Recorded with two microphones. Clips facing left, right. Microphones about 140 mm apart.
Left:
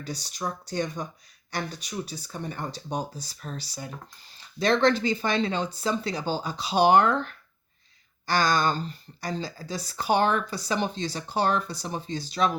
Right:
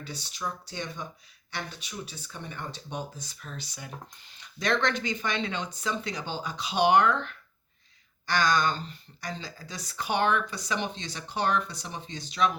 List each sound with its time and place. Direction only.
0.0 s speech: 40° left (ahead or behind)